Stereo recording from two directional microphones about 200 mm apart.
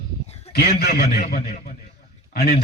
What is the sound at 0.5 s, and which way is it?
A man's voice, 50° left (ahead or behind).